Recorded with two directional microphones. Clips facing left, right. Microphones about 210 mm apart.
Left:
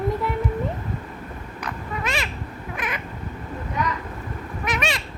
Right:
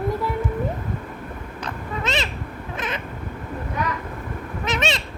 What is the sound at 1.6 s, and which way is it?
Cat, 25° right (ahead or behind).